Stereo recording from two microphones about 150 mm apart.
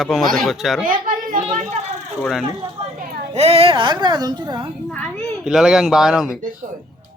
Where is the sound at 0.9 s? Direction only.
65° right (ahead or behind).